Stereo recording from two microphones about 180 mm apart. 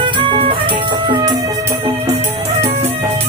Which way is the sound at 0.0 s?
30° right (ahead or behind).